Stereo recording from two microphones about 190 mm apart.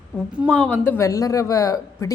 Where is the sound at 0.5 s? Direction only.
5° left (ahead or behind).